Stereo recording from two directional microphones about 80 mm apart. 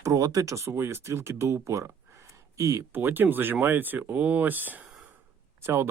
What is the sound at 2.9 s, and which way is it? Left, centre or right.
Speech, right.